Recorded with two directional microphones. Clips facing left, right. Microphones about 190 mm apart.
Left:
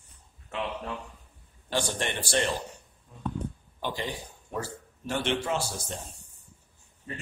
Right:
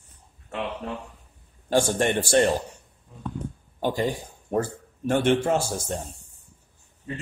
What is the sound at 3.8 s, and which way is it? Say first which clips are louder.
Speech: right 8 dB; 45° right (ahead or behind).